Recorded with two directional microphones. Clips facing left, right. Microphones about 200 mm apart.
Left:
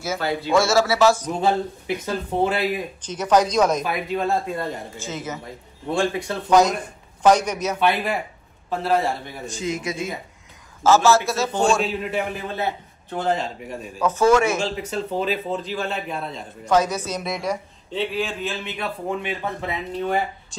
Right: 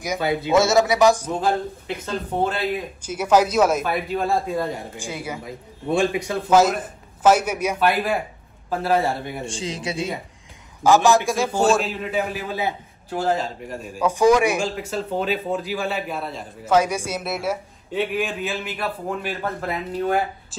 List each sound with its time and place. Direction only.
0.0 s speech: 15° right (ahead or behind)
2.0 s speech: 10° left (ahead or behind)
3.0 s speech: 10° right (ahead or behind)
6.5 s a man's voice: 5° right (ahead or behind)
9.4 s speech: 30° right (ahead or behind)
10.8 s a man's voice: 15° right (ahead or behind)
14.0 s speech: 15° right (ahead or behind)
15.0 s a man's voice: centre (ahead or behind)
18.5 s a man's voice: 5° right (ahead or behind)